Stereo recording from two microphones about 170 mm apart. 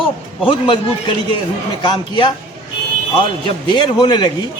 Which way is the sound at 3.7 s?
30° left (ahead or behind).